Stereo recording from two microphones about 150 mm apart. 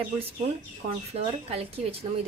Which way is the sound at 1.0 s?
45° right (ahead or behind).